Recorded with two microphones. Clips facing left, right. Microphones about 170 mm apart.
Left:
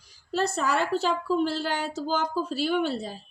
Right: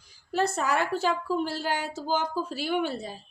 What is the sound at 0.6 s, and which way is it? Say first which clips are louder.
Speech: left 3 dB; 10° right (ahead or behind).